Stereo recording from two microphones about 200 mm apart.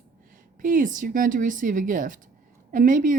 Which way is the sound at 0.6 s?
40° right (ahead or behind).